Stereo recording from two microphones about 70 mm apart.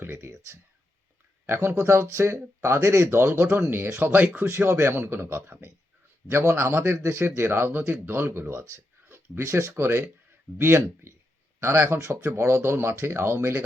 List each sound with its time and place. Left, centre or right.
0.0 s speech: right
4.1 s speech: right
4.4 s speech: right